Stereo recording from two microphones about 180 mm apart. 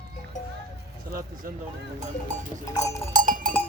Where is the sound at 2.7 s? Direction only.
20° left (ahead or behind).